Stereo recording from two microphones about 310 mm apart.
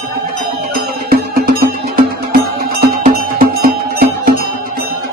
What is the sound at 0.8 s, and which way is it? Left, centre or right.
Music, right.